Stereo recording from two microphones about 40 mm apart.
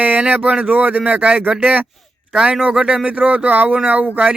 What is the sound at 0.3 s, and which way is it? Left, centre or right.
Speech, right.